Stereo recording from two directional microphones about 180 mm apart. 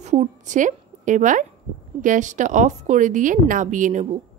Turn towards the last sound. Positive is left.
turn(degrees=-45)  # may be behind; listen again after turning